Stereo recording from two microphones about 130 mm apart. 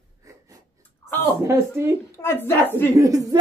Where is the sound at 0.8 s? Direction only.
15° left (ahead or behind).